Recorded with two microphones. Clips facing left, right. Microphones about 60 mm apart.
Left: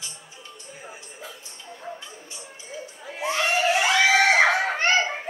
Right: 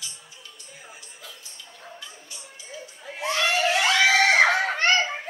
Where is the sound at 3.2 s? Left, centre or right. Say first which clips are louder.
Even; right.